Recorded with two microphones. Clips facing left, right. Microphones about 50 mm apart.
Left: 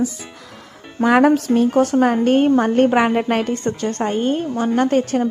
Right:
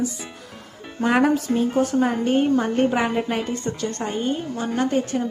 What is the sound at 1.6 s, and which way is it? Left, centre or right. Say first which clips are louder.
A woman's voice: left 5 dB; left.